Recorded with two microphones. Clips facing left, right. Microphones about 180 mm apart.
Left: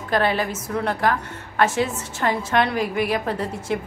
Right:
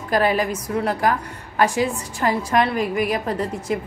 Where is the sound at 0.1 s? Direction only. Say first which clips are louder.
Right 2 dB; 5° right (ahead or behind).